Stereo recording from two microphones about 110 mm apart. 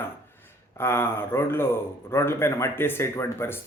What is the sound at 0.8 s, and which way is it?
A man's voice, 20° left (ahead or behind).